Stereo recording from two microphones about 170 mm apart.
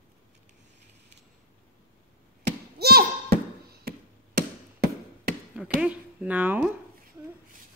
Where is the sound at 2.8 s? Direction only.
65° right (ahead or behind).